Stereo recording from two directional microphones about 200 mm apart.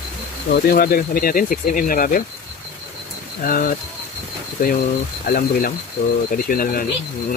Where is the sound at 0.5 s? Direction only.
50° left (ahead or behind).